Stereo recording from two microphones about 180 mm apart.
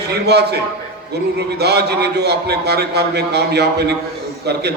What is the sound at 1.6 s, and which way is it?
A man's voice, 65° right (ahead or behind).